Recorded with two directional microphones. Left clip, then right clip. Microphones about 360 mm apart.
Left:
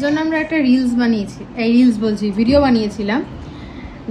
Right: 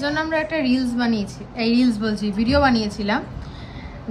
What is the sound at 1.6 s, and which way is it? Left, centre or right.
Speech, centre.